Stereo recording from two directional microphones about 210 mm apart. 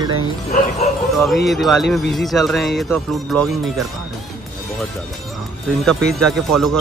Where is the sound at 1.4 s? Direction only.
Centre (ahead or behind).